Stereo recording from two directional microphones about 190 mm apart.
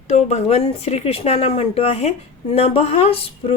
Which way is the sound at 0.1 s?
35° left (ahead or behind).